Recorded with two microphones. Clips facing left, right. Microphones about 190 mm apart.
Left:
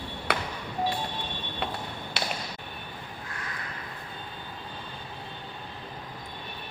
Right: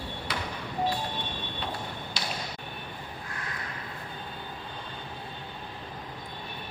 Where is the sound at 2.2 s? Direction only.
65° left (ahead or behind).